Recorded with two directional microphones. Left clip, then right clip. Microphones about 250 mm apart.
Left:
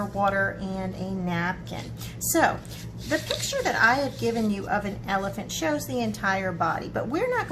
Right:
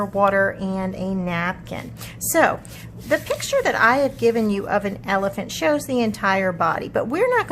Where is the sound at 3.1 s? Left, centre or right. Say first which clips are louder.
Right 7 dB; right.